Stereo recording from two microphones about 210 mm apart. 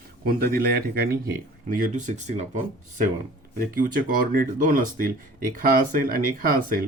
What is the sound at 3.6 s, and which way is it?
Speech, 40° right (ahead or behind).